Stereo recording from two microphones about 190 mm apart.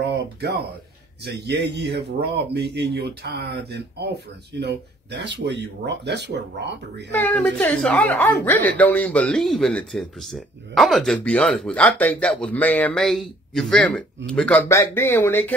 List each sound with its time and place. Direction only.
0.1 s speech: 60° right (ahead or behind)
7.2 s speech: 10° left (ahead or behind)